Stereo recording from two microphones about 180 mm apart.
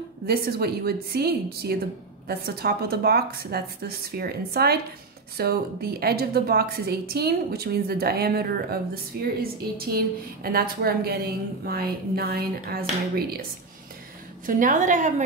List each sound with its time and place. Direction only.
0.3 s a woman's voice: 60° right (ahead or behind)
14.4 s a woman's voice: 45° right (ahead or behind)